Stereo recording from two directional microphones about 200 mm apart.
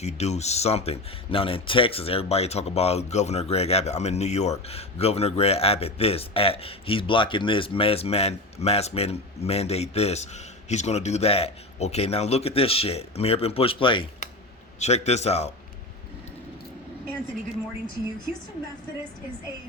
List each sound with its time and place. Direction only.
0.0 s speech: 35° left (ahead or behind)